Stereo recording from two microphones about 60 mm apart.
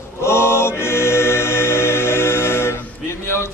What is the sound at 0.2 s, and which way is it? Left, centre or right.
Choir, left.